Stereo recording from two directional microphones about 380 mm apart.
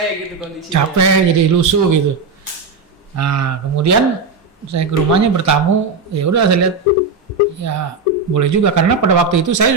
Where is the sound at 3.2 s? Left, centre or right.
Right.